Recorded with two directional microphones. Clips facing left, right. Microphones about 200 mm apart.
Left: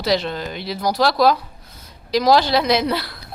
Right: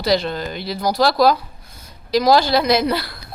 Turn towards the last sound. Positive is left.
turn(degrees=0)  # may be behind; listen again after turning